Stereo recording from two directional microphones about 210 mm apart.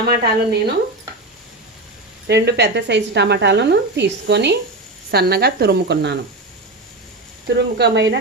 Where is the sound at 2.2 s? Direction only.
55° right (ahead or behind).